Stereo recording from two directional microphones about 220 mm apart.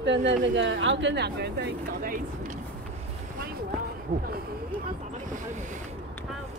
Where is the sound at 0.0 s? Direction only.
55° right (ahead or behind).